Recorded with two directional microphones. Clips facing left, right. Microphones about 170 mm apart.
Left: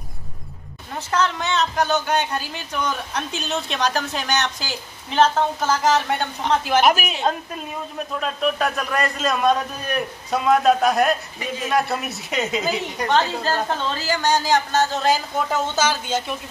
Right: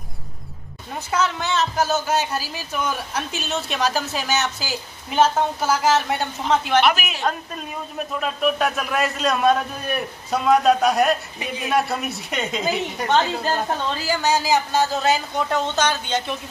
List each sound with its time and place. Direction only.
1.1 s speech: 5° right (ahead or behind)
6.8 s a woman's voice: 45° left (ahead or behind)
8.2 s speech: 5° right (ahead or behind)